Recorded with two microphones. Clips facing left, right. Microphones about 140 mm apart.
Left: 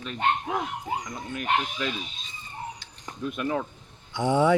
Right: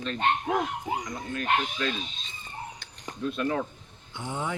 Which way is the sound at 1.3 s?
15° left (ahead or behind).